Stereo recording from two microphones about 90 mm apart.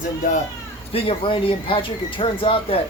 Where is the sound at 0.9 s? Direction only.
90° left.